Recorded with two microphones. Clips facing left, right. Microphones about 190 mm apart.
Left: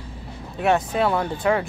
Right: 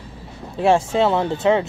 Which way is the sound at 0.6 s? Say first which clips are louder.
Right 4 dB; 25° right (ahead or behind).